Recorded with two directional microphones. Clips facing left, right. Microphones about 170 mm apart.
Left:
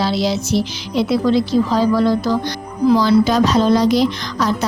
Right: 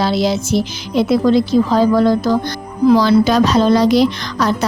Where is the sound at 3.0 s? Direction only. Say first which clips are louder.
Right 2 dB; 70° right (ahead or behind).